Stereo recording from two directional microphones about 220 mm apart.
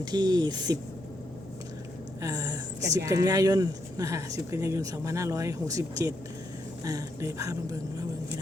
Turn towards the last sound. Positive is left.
turn(degrees=-15)  # may be behind; listen again after turning